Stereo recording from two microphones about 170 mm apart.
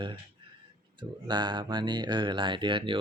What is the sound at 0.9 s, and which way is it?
Speech, 25° right (ahead or behind).